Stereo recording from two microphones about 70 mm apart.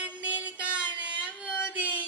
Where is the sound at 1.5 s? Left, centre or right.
Left.